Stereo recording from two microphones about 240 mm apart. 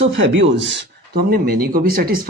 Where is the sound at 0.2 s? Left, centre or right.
Right.